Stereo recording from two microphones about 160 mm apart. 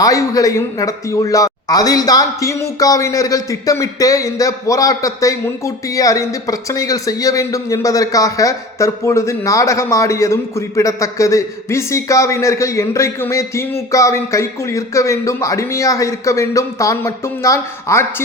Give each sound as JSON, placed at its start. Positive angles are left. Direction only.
{"t": 0.0, "sound": "a man's voice", "side_deg": 20}